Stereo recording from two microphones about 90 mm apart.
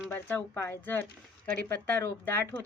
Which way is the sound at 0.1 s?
20° left (ahead or behind).